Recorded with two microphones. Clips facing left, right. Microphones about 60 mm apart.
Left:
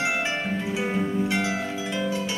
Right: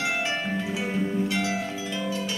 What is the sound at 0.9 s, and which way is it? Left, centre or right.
Music, left.